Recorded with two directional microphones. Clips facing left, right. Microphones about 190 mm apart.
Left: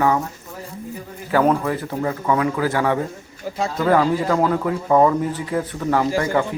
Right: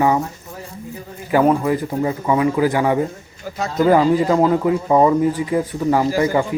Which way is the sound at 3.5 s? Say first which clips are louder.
Left 1 dB; 30° left (ahead or behind).